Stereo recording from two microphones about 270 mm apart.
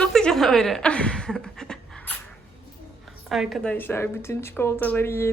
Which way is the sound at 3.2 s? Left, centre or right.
Centre.